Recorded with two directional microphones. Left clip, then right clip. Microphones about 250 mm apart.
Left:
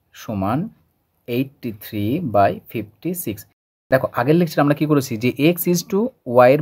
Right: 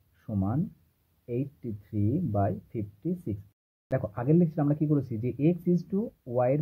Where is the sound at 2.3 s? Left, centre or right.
Left.